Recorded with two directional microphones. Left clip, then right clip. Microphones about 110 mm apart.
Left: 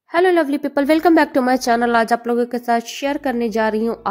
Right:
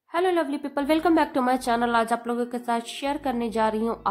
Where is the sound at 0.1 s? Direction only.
40° left (ahead or behind).